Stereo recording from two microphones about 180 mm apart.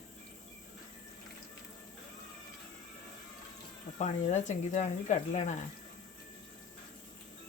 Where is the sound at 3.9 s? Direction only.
40° left (ahead or behind).